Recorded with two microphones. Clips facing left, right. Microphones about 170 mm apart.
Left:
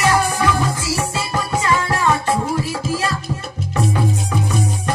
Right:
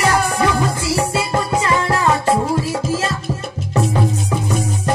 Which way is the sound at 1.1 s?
25° right (ahead or behind).